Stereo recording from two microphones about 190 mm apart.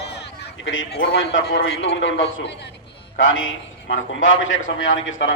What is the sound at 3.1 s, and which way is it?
A man's voice, 90° left.